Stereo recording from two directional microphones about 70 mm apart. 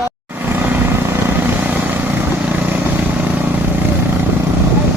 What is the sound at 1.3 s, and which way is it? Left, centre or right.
Vehicle, right.